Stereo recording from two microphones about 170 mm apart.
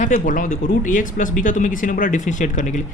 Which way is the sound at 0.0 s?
50° left (ahead or behind).